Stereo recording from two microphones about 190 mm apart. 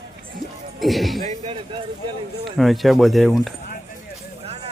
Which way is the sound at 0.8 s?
Centre (ahead or behind).